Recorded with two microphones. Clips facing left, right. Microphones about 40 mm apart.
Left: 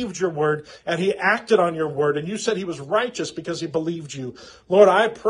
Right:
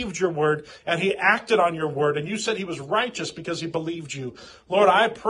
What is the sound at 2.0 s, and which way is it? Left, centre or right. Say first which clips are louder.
Speech: left 2 dB; right.